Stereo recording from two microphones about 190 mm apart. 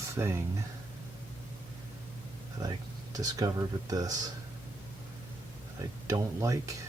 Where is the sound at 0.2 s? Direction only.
15° right (ahead or behind).